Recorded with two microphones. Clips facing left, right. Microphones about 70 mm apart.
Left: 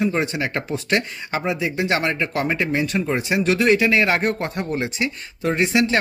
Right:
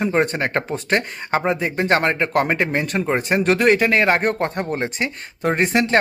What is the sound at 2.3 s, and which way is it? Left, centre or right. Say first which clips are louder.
A man's voice: right 3 dB; right.